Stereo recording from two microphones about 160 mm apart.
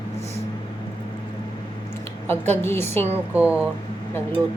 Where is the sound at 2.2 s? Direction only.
15° left (ahead or behind).